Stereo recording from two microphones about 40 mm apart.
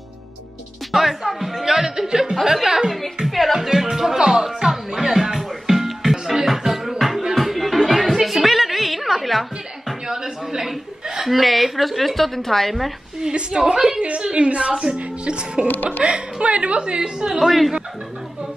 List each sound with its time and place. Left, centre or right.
0.9 s music: centre
2.5 s a woman's voice: centre
3.5 s a woman's voice: centre
4.2 s music: centre
10.0 s a sound: centre
11.2 s speech: centre
13.2 s a woman's voice: centre
14.2 s a woman's voice: right
15.7 s speech: left
16.0 s a woman's voice: right
17.3 s speech: centre